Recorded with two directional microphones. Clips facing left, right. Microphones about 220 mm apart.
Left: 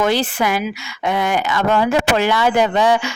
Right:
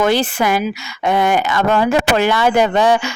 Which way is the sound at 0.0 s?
50° right (ahead or behind).